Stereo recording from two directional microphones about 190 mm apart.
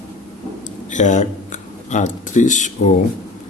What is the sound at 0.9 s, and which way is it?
Speech, 40° left (ahead or behind).